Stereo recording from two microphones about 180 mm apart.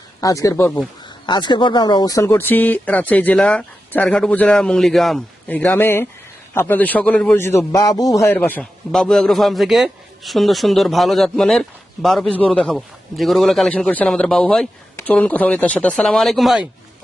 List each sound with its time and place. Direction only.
0.2 s a man's voice: 20° left (ahead or behind); by 16.6 s centre (ahead or behind)